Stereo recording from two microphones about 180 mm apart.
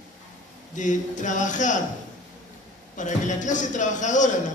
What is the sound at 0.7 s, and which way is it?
A man's voice, 45° left (ahead or behind).